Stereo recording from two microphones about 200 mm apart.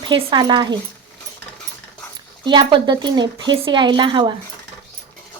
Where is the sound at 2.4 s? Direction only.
20° right (ahead or behind).